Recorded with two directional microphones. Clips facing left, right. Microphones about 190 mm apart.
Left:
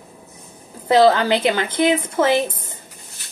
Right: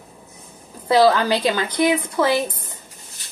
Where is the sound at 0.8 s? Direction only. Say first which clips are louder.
Left 1 dB; 25° left (ahead or behind).